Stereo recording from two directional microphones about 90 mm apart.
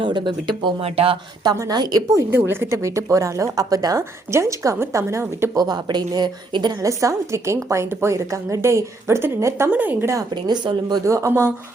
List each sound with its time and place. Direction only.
0.0 s speech: 60° right (ahead or behind); by 1.2 s 90° right
1.7 s a woman's voice: 50° right (ahead or behind)
2.3 s a woman's voice: 25° right (ahead or behind)
5.5 s a woman's voice: 50° right (ahead or behind)
6.8 s a woman's voice: 35° right (ahead or behind)
9.7 s a woman's voice: 20° right (ahead or behind)
10.3 s a woman's voice: 55° right (ahead or behind)
11.0 s a woman's voice: 35° right (ahead or behind)